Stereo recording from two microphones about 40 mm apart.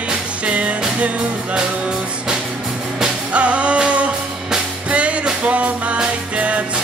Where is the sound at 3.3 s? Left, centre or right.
Right.